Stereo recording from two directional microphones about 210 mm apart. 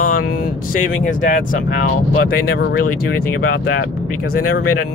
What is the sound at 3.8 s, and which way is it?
Speech, 45° left (ahead or behind).